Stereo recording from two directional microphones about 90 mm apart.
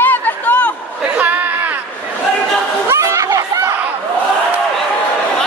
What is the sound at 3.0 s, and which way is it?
Chatter, 35° right (ahead or behind).